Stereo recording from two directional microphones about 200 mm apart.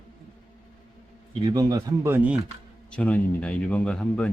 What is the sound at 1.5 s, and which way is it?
Speech, 20° right (ahead or behind).